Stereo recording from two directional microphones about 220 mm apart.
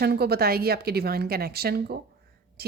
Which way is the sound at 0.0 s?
45° right (ahead or behind).